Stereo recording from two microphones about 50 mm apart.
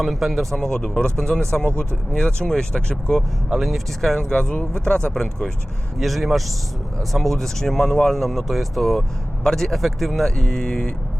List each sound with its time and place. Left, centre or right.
0.0 s speech: centre
0.5 s speech: centre
2.1 s speech: centre
4.2 s speech: centre
6.0 s speech: centre
9.0 s speech: centre